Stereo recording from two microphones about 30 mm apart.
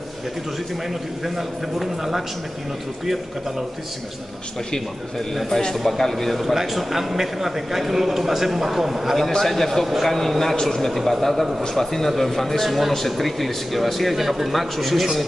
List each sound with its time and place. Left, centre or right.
1.2 s a man's voice: centre
5.9 s a man's voice: centre
6.4 s a man's voice: centre
9.4 s a man's voice: centre
10.9 s a man's voice: centre